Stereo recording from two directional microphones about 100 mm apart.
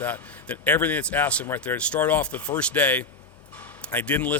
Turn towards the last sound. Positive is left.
turn(degrees=15)  # may be behind; listen again after turning